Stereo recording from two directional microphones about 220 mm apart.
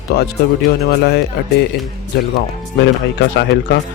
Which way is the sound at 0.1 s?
45° left (ahead or behind).